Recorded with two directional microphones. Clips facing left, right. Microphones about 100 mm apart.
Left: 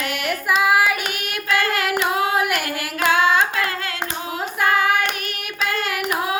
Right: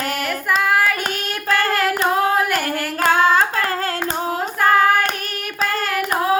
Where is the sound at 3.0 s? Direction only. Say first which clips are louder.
Right 2 dB; 40° right (ahead or behind).